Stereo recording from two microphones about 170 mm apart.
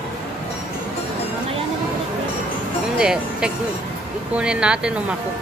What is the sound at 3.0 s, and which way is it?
Speech, 5° right (ahead or behind).